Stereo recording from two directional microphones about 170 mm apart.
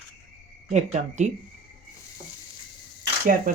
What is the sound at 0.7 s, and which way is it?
Speech, 45° right (ahead or behind).